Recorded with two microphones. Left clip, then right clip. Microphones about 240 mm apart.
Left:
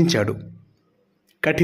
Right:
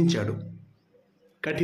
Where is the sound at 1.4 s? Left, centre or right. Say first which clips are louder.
Left 9 dB; left.